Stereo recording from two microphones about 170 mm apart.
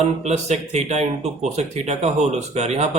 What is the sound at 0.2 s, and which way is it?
Speech, 40° right (ahead or behind).